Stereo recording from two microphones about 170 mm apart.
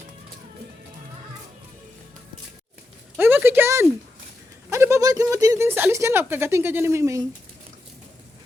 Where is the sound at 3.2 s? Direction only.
10° right (ahead or behind).